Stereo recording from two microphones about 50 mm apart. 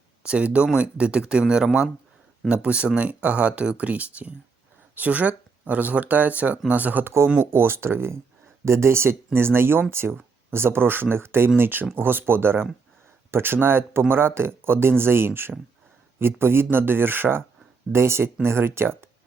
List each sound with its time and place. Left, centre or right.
0.2 s speech: right
7.0 s speech: right
7.3 s speech: right
17.9 s speech: right